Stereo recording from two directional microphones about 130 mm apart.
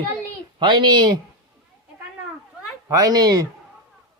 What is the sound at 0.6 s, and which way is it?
Speech, 35° right (ahead or behind).